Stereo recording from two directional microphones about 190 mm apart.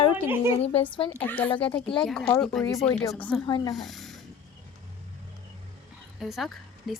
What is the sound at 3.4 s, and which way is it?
Speech, 20° left (ahead or behind).